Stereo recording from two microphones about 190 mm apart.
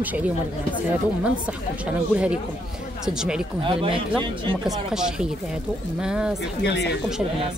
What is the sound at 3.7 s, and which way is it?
Speech, 30° right (ahead or behind).